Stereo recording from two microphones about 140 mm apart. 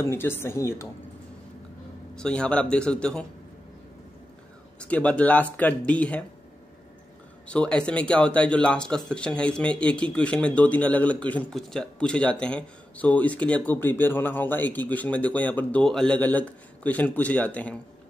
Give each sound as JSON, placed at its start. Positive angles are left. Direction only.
{"t": 0.0, "sound": "a woman's voice", "side_deg": 15}
{"t": 2.1, "sound": "speech", "side_deg": 5}
{"t": 4.7, "sound": "speech", "side_deg": 10}
{"t": 7.4, "sound": "speech", "side_deg": 10}